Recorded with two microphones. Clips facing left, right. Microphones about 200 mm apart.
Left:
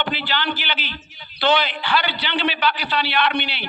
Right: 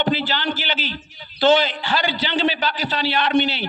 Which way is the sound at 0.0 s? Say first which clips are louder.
Right 3 dB; 45° right (ahead or behind).